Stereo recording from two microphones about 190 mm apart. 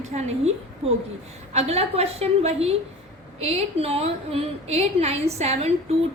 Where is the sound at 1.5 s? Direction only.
35° right (ahead or behind).